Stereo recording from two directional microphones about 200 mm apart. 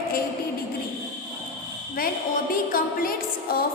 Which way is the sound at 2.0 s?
45° left (ahead or behind).